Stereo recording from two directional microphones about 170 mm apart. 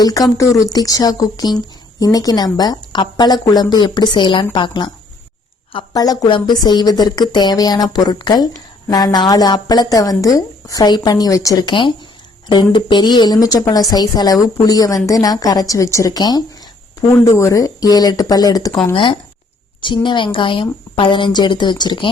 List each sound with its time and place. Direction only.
0.0 s speech: 20° left (ahead or behind)
19.8 s speech: 30° left (ahead or behind)